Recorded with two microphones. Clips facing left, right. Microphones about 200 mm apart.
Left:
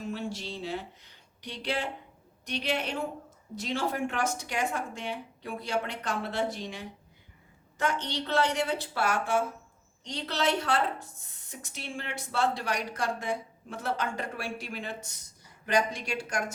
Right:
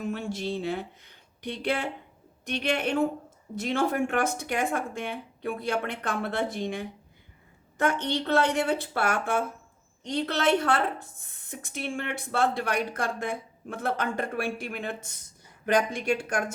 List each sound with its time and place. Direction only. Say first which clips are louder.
0.0 s a woman's voice: right 4 dB; 55° right (ahead or behind)